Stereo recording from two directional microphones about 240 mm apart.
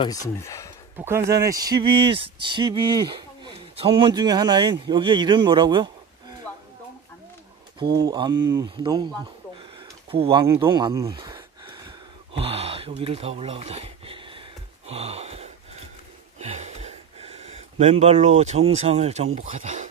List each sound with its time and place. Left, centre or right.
0.0 s speech: centre
0.9 s speech: centre
7.9 s speech: centre
9.6 s a sound: right